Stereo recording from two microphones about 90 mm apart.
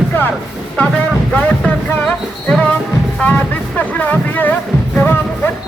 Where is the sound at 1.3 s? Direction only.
10° left (ahead or behind).